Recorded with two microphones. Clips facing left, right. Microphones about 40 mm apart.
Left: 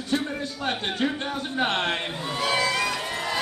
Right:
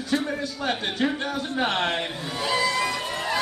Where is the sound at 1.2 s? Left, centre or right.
Left.